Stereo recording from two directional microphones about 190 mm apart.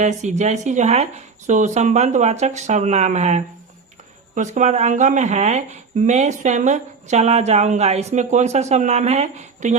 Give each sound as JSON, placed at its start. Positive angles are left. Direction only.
{"t": 0.0, "sound": "speech", "side_deg": -40}